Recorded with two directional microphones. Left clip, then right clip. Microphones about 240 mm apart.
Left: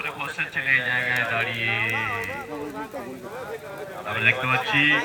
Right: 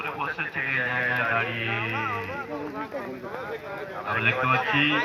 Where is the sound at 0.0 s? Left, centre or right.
Left.